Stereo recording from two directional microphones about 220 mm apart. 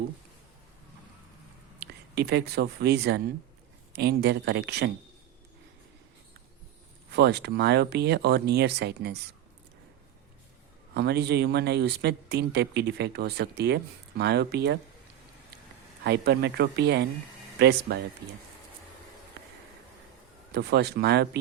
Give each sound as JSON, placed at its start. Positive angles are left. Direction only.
{"t": 1.8, "sound": "speech", "side_deg": -50}
{"t": 7.1, "sound": "speech", "side_deg": -50}
{"t": 10.9, "sound": "speech", "side_deg": -50}
{"t": 16.0, "sound": "speech", "side_deg": -50}
{"t": 20.5, "sound": "speech", "side_deg": -50}